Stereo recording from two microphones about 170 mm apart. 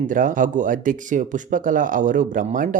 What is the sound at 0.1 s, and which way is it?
Speech, 50° right (ahead or behind).